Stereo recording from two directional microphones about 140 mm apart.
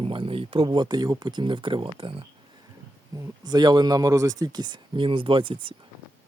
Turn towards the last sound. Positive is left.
turn(degrees=-35)  # may be behind; listen again after turning